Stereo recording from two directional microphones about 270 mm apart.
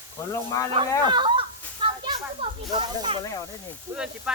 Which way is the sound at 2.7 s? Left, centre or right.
Centre.